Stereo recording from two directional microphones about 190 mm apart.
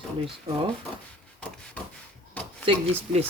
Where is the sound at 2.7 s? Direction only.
35° right (ahead or behind).